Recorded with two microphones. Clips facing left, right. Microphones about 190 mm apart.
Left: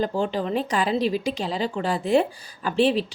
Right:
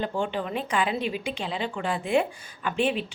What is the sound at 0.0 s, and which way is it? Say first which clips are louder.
Speech: left 4 dB; 35° left (ahead or behind).